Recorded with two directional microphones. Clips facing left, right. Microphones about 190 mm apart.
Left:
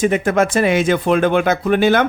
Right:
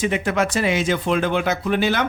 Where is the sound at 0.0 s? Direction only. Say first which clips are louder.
Left 5 dB; 50° left (ahead or behind).